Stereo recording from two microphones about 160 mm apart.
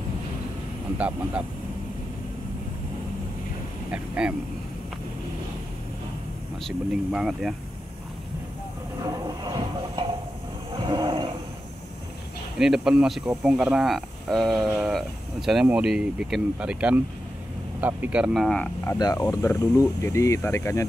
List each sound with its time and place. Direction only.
0.9 s speech: 5° right (ahead or behind)
3.9 s speech: 10° right (ahead or behind)
6.6 s speech: centre (ahead or behind)
9.0 s train: 25° right (ahead or behind)
10.9 s a sound: 30° right (ahead or behind)
12.5 s speech: 5° right (ahead or behind)
18.9 s speech: 25° left (ahead or behind)